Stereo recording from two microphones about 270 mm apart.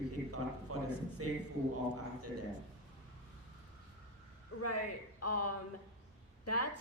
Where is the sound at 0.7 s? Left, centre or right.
Right.